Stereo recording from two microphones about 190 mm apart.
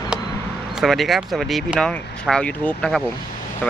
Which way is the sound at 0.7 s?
Centre (ahead or behind).